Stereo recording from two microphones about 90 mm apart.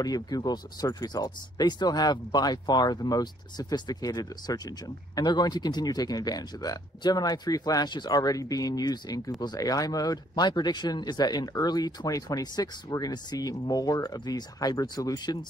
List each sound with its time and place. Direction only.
0.0 s speech: 45° left (ahead or behind)